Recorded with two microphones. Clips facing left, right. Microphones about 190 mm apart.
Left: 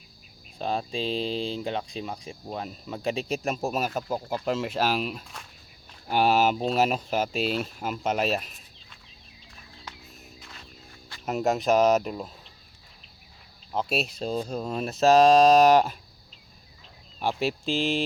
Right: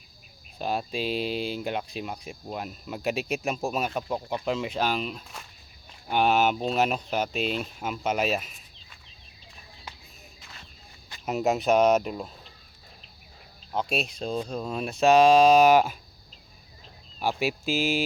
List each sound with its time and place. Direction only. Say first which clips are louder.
0.6 s speech: even; 5° right (ahead or behind)
1.0 s mantra: even; 25° left (ahead or behind)
1.3 s speech: even; 5° right (ahead or behind)
10.4 s music: right 1 dB; centre (ahead or behind)
11.3 s speech: even; centre (ahead or behind)
13.9 s speech: left 2 dB; 5° left (ahead or behind)
17.2 s speech: even; 5° right (ahead or behind)